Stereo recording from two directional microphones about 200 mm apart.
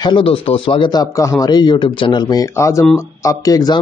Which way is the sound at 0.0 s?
25° left (ahead or behind).